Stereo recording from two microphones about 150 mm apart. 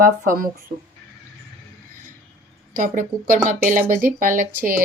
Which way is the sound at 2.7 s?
65° right (ahead or behind).